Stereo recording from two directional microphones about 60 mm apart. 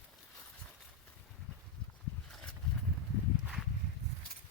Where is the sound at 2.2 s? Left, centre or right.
Centre.